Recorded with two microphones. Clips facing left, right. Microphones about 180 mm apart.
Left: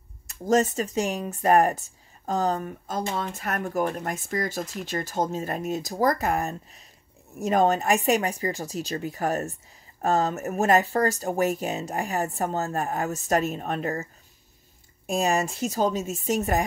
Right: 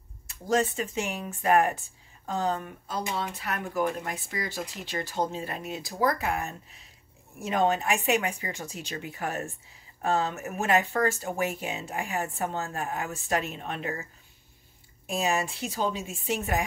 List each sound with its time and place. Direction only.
0.3 s speech: 45° left (ahead or behind)
15.0 s speech: 45° left (ahead or behind)